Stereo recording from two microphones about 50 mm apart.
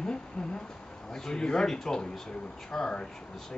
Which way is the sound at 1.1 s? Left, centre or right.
Centre.